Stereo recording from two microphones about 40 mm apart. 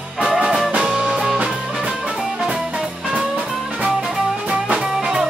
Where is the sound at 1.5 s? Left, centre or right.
Centre.